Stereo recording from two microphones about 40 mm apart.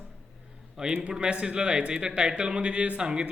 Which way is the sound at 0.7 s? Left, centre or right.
Centre.